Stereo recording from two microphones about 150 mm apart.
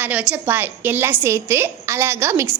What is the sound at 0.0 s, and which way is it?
A woman's voice, 10° right (ahead or behind).